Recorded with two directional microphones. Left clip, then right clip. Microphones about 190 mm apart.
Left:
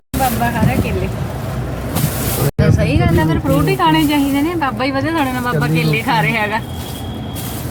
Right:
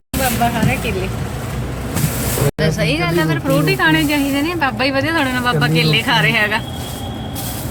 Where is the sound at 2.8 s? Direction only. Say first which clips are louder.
Left 1 dB; 10° left (ahead or behind).